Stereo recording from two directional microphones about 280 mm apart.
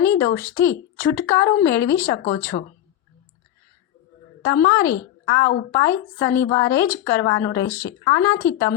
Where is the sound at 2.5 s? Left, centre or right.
Left.